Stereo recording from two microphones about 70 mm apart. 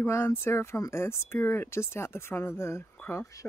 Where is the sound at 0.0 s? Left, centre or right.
Left.